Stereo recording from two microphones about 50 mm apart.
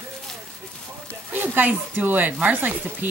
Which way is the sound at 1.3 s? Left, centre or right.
Right.